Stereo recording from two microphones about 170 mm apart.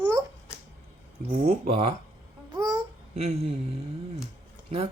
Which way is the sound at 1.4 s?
35° right (ahead or behind).